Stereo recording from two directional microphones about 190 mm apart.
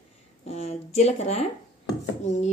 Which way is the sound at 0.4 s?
30° left (ahead or behind).